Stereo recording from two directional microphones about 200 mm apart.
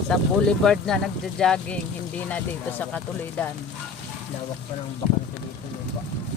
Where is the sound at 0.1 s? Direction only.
Centre (ahead or behind).